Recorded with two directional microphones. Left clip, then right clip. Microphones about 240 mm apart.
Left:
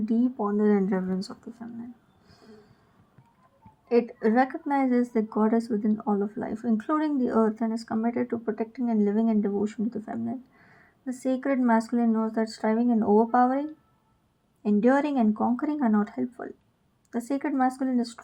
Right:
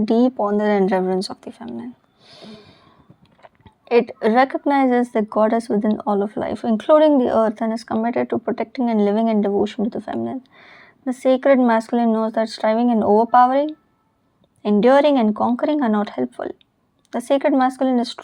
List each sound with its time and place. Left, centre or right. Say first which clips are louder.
0.0 s speech: right 10 dB; right
2.3 s a sound: right 12 dB; right
4.2 s speech: right 8 dB; right